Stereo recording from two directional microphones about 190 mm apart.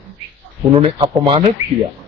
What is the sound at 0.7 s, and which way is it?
Speech, 30° right (ahead or behind).